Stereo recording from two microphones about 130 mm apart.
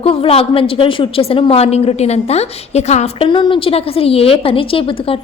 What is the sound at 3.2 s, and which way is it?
A woman's voice, 35° left (ahead or behind).